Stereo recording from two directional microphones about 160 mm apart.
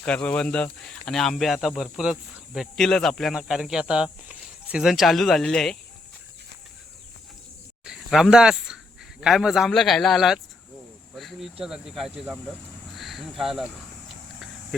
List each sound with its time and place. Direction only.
0.0 s speech: 5° left (ahead or behind)
7.9 s speech: 5° right (ahead or behind)
11.1 s a sound: centre (ahead or behind)
11.6 s speech: centre (ahead or behind)